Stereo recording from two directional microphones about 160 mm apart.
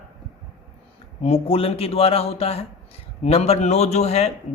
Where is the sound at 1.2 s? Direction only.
40° left (ahead or behind).